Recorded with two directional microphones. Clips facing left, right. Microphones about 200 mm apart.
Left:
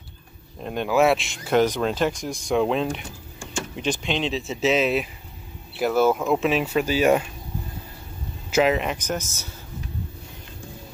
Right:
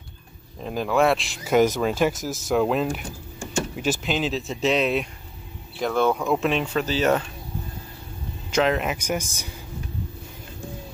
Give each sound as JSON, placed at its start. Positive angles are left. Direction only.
{"t": 0.7, "sound": "speech", "side_deg": 0}
{"t": 8.5, "sound": "speech", "side_deg": 5}